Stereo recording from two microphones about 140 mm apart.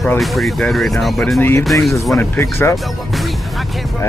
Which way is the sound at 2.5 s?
20° left (ahead or behind).